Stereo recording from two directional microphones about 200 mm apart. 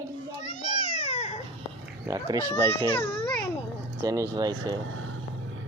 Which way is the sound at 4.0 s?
15° right (ahead or behind).